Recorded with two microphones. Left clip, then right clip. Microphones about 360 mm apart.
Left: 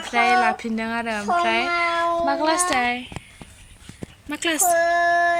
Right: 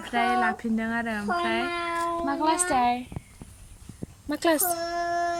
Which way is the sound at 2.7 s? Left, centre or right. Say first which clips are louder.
Left 1 dB; centre.